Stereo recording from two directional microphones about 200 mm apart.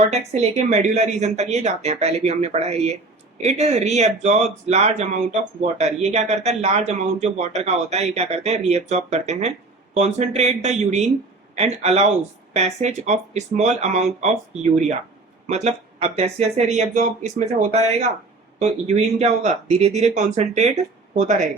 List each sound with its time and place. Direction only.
0.1 s speech: 35° right (ahead or behind)